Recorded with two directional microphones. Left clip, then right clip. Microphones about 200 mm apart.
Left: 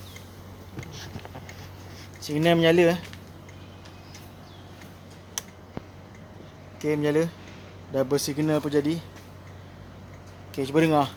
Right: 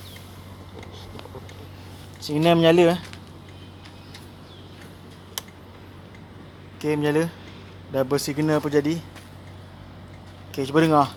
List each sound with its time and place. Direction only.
2.2 s speech: 15° right (ahead or behind)
6.8 s speech: 10° right (ahead or behind)
10.5 s speech: 10° right (ahead or behind)